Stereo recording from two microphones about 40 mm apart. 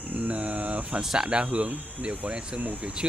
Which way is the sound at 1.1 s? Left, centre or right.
Right.